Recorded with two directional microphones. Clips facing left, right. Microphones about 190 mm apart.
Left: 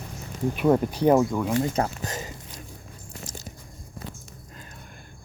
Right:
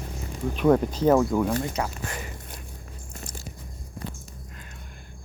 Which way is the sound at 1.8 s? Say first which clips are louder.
Left 4 dB; 40° left (ahead or behind).